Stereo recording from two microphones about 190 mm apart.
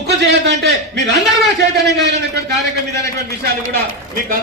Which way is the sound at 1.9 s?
65° right (ahead or behind).